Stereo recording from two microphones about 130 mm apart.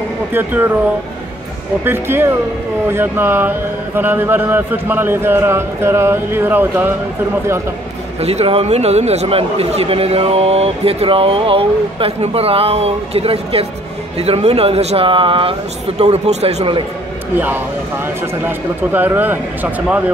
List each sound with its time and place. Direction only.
0.3 s speech: 15° right (ahead or behind)
1.9 s speech: 15° right (ahead or behind)
8.2 s speech: 55° right (ahead or behind)
16.0 s speech: 55° right (ahead or behind)
18.8 s speech: 15° right (ahead or behind)